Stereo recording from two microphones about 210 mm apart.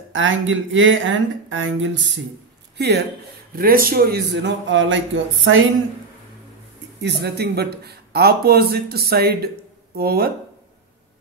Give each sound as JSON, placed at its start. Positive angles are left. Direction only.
{"t": 0.1, "sound": "speech", "side_deg": -65}
{"t": 2.8, "sound": "speech", "side_deg": -50}
{"t": 7.0, "sound": "speech", "side_deg": -50}